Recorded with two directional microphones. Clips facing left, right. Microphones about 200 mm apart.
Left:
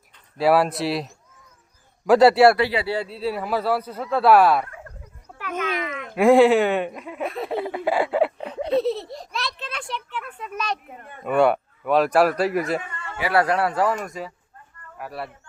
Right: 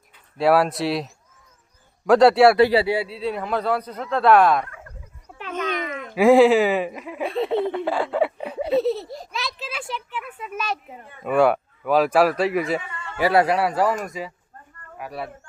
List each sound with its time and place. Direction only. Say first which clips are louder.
0.3 s speech: even; centre (ahead or behind)
2.6 s speech: right 7 dB; 40° right (ahead or behind)
2.8 s speech: right 3 dB; 10° right (ahead or behind)
3.1 s speech: even; 5° left (ahead or behind)
5.4 s a sound: even; 30° right (ahead or behind)
5.6 s a sound: right 1 dB; 5° left (ahead or behind)
6.0 s speech: right 1 dB; centre (ahead or behind)
8.4 s a child's voice: right 1 dB; 10° right (ahead or behind)
13.3 s speech: right 1 dB; 15° right (ahead or behind)
13.6 s speech: right 1 dB; centre (ahead or behind)